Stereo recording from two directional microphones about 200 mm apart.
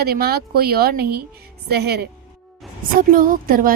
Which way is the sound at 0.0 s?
50° right (ahead or behind).